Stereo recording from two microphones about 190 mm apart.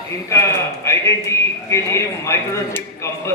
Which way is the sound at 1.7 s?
15° left (ahead or behind).